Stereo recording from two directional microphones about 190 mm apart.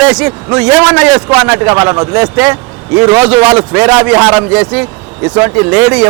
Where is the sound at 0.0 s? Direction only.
5° right (ahead or behind).